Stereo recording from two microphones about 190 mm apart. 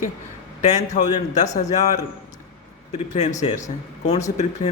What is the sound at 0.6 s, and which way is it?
Speech, 40° left (ahead or behind).